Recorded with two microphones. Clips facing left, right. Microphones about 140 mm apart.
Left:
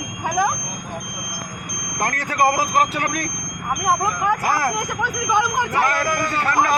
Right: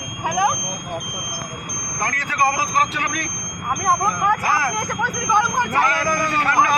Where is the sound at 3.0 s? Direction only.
35° left (ahead or behind).